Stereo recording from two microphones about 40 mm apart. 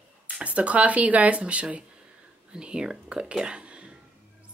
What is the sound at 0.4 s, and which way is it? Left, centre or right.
Speech, right.